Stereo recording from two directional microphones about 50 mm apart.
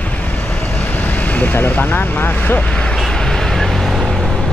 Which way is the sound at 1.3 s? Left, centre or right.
Left.